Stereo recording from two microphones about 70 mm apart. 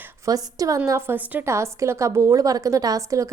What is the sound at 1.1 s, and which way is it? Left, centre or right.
Speech, right.